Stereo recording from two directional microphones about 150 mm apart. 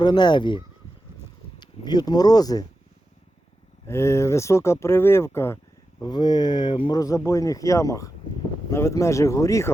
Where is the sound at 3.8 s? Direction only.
20° left (ahead or behind).